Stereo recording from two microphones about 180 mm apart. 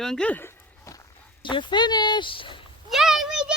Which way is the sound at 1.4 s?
25° left (ahead or behind).